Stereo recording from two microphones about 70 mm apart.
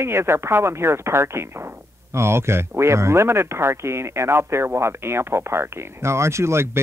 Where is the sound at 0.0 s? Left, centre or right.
Right.